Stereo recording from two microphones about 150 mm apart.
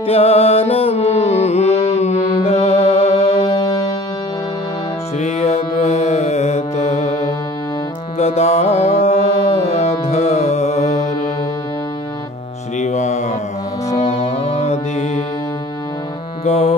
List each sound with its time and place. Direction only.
0.0 s music: 40° left (ahead or behind)
3.6 s music: 25° left (ahead or behind)
5.2 s mantra: 45° left (ahead or behind)
8.2 s music: 45° left (ahead or behind)
12.7 s mantra: 50° left (ahead or behind)
13.9 s music: 45° left (ahead or behind)
16.4 s music: 45° left (ahead or behind)